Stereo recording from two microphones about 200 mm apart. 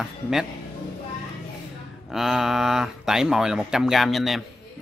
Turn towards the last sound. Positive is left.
turn(degrees=0)  # may be behind; listen again after turning